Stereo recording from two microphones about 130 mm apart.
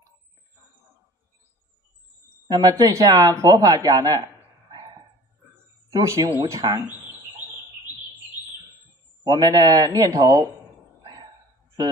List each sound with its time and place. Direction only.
2.4 s speech: 30° right (ahead or behind)
5.9 s a man's voice: 25° right (ahead or behind)
7.9 s bird: 10° right (ahead or behind)
9.2 s a man's voice: 30° right (ahead or behind)